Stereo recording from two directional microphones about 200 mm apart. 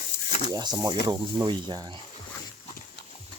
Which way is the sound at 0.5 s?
20° right (ahead or behind).